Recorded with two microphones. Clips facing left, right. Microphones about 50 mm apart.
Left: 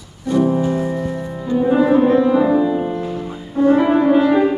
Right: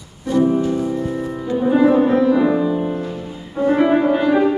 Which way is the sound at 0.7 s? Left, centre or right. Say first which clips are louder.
Even; left.